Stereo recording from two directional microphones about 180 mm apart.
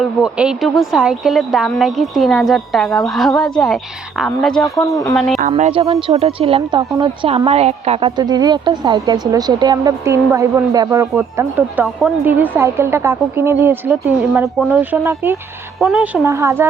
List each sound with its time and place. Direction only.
0.0 s a woman's voice: 5° right (ahead or behind)
4.6 s speech: 20° left (ahead or behind)
5.1 s a woman's voice: centre (ahead or behind)
5.4 s speech: 40° right (ahead or behind); by 15.4 s 15° right (ahead or behind)
15.8 s a woman's voice: 5° right (ahead or behind)
16.2 s speech: 15° right (ahead or behind)